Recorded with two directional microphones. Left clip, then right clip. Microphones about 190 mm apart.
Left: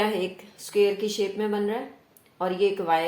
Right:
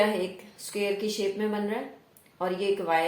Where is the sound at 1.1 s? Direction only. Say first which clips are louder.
Left 2 dB; 35° left (ahead or behind).